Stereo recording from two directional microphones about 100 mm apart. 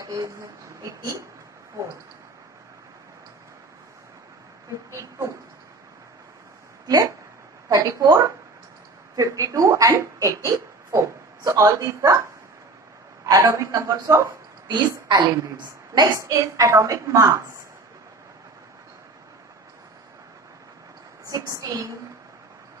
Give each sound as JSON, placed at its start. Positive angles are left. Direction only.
{"t": 0.0, "sound": "a woman's voice", "side_deg": -35}
{"t": 7.7, "sound": "a woman's voice", "side_deg": -35}
{"t": 13.2, "sound": "a woman's voice", "side_deg": -35}
{"t": 14.7, "sound": "a woman's voice", "side_deg": -50}
{"t": 21.3, "sound": "a woman's voice", "side_deg": -35}